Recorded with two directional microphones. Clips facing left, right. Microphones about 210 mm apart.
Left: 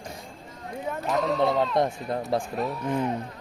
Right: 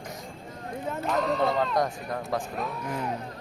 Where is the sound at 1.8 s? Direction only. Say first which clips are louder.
Left 3 dB; 25° left (ahead or behind).